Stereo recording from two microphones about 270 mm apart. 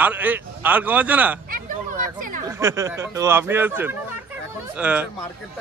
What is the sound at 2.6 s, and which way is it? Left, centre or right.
Speech, centre.